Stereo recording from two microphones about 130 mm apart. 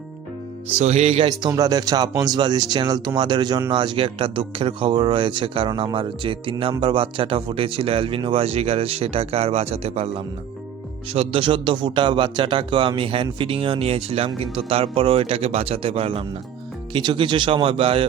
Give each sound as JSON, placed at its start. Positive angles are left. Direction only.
{"t": 0.8, "sound": "speech", "side_deg": -55}
{"t": 1.5, "sound": "speech", "side_deg": -30}